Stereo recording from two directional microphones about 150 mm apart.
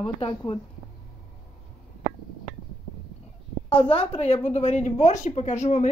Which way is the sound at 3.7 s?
40° left (ahead or behind).